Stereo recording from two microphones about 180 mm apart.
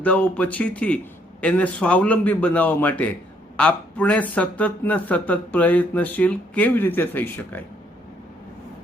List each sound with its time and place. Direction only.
0.0 s speech: 5° left (ahead or behind)